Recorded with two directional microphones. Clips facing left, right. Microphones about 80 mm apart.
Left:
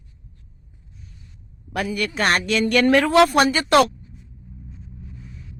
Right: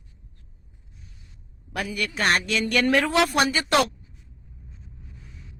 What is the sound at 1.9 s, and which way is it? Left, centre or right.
A woman's voice, left.